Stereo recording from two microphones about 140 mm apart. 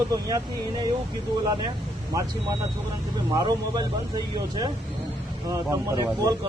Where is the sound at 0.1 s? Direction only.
25° right (ahead or behind).